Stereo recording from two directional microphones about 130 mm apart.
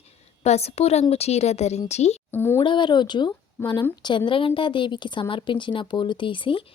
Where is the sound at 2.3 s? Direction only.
15° left (ahead or behind).